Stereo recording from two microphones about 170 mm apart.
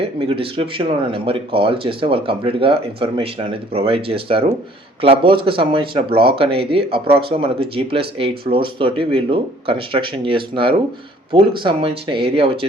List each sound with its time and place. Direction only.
0.0 s speech: 35° right (ahead or behind)